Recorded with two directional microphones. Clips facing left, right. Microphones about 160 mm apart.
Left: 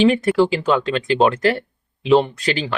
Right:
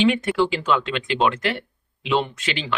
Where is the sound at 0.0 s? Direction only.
40° left (ahead or behind).